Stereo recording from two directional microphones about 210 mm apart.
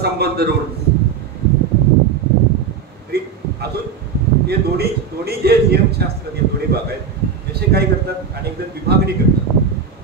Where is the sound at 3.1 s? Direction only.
50° right (ahead or behind).